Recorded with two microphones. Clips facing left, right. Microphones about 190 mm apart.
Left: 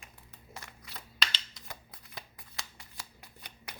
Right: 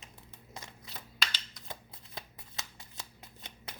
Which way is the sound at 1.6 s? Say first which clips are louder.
Right 2 dB; 20° right (ahead or behind).